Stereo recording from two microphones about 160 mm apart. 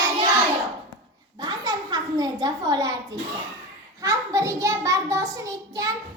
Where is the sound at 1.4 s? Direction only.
25° right (ahead or behind).